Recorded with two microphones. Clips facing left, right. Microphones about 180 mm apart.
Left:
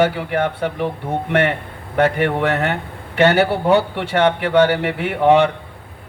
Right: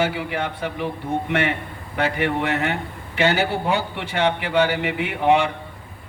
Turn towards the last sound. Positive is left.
turn(degrees=60)  # may be behind; listen again after turning